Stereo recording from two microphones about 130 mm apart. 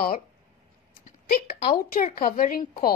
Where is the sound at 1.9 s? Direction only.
90° left.